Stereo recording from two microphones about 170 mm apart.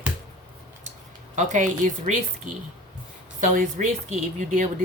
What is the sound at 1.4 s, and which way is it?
Speech, 45° right (ahead or behind).